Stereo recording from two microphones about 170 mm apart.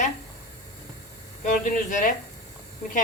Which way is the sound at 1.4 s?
50° left (ahead or behind).